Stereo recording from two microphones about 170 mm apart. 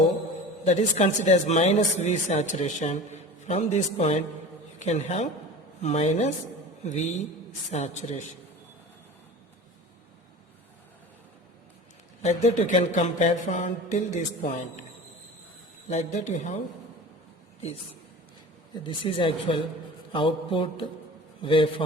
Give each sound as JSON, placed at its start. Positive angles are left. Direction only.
{"t": 0.6, "sound": "a man's voice", "side_deg": 40}
{"t": 12.2, "sound": "speech", "side_deg": 40}
{"t": 15.9, "sound": "speech", "side_deg": 45}
{"t": 19.0, "sound": "a man's voice", "side_deg": 30}
{"t": 20.1, "sound": "mantra", "side_deg": 30}
{"t": 21.4, "sound": "a man's voice", "side_deg": 30}